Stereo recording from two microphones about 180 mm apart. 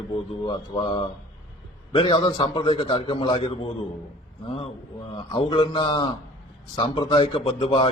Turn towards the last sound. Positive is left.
turn(degrees=30)  # may be behind; listen again after turning